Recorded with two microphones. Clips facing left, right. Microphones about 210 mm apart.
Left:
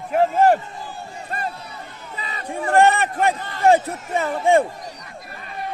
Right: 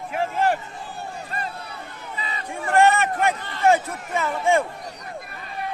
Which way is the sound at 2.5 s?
35° left (ahead or behind).